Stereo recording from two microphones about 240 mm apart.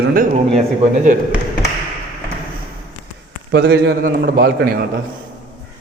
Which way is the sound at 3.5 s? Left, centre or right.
Right.